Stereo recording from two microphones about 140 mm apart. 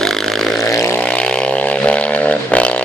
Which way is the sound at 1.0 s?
10° left (ahead or behind).